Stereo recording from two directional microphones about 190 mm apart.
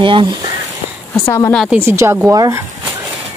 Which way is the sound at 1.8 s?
15° right (ahead or behind).